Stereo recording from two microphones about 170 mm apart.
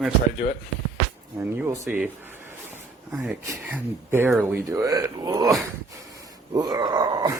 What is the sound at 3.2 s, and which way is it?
Speech, 10° right (ahead or behind).